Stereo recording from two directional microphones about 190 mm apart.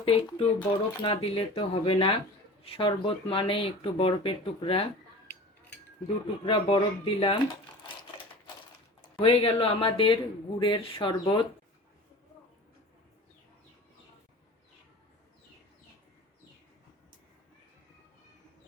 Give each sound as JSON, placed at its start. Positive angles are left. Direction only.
{"t": 0.0, "sound": "speech", "side_deg": 30}
{"t": 6.4, "sound": "speech", "side_deg": 25}
{"t": 9.1, "sound": "speech", "side_deg": 25}